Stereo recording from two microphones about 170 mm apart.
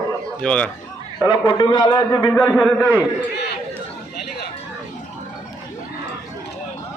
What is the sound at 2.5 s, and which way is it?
Speech, centre (ahead or behind).